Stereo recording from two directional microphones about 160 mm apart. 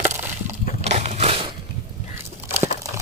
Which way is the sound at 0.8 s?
45° right (ahead or behind).